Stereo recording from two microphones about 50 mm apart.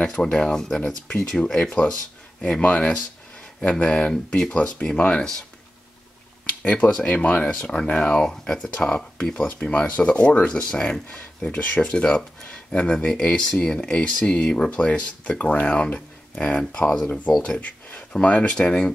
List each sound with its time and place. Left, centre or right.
0.0 s speech: left
2.4 s speech: left
3.8 s speech: left
4.1 s speech: centre
4.5 s speech: left
6.4 s a sound: left
7.1 s speech: left
10.5 s speech: centre
18.2 s speech: left